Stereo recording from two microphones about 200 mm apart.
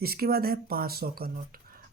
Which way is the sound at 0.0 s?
50° right (ahead or behind).